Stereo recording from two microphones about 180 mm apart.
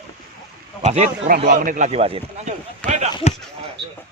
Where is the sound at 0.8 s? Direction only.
40° right (ahead or behind).